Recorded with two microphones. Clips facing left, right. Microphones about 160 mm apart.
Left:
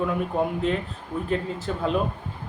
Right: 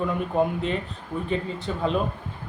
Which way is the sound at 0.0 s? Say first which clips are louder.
Right 1 dB; centre (ahead or behind).